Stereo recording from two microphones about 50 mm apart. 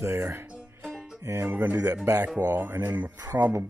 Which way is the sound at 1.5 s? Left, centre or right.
Right.